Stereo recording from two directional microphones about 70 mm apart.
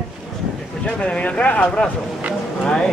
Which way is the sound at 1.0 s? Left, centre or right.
Centre.